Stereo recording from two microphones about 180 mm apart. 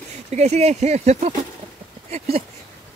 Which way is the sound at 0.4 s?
35° right (ahead or behind).